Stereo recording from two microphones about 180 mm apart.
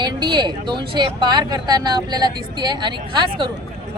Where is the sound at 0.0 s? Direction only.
25° right (ahead or behind).